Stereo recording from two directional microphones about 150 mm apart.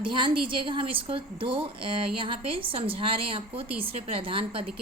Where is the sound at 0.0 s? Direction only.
35° right (ahead or behind).